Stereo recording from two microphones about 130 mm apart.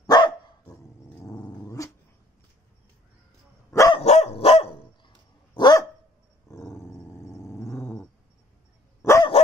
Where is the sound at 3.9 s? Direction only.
55° left (ahead or behind); by 5.8 s 35° left (ahead or behind).